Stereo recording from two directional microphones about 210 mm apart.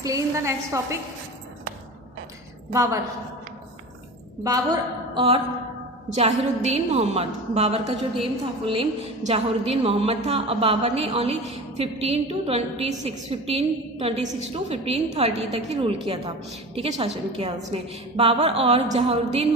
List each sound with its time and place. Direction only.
0.0 s a woman's voice: 15° right (ahead or behind)
2.7 s a woman's voice: 15° right (ahead or behind)
4.4 s a woman's voice: 20° right (ahead or behind)